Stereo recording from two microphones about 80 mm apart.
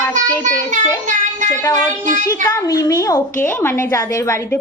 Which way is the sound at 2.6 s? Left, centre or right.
Left.